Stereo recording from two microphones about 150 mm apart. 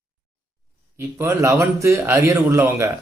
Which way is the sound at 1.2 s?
20° right (ahead or behind).